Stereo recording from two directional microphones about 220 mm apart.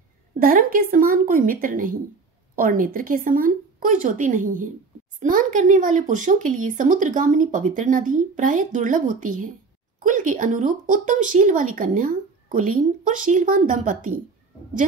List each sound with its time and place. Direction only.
0.4 s speech: 40° right (ahead or behind)